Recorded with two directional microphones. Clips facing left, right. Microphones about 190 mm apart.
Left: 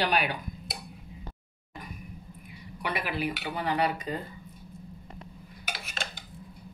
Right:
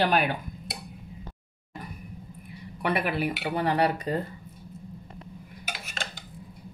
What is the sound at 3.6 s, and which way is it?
Cutlery, 35° right (ahead or behind).